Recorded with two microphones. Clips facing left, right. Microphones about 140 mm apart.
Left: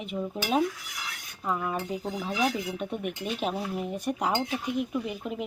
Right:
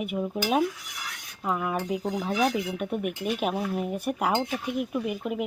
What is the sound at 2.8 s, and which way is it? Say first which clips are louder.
Speech: right 3 dB; 10° right (ahead or behind).